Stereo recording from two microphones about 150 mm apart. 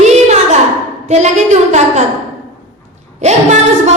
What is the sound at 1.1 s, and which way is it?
Speech, 50° right (ahead or behind).